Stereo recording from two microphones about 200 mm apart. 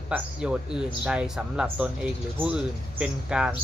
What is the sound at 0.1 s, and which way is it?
Speech, 5° right (ahead or behind).